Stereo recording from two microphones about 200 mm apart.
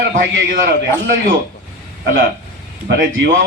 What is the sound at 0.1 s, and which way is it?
Speech, 45° right (ahead or behind).